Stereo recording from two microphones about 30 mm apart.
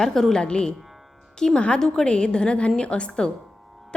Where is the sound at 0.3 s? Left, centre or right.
Left.